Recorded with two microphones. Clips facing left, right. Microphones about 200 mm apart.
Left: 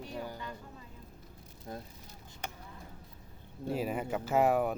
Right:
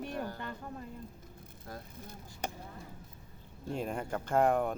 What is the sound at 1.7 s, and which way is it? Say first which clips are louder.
Speech: left 3 dB; 20° left (ahead or behind).